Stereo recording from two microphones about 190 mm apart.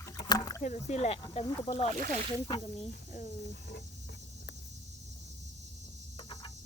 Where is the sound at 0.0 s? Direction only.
20° left (ahead or behind).